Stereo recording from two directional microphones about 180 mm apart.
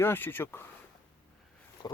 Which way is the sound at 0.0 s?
10° left (ahead or behind).